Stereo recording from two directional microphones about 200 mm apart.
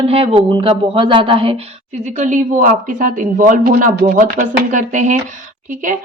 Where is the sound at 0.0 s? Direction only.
30° right (ahead or behind).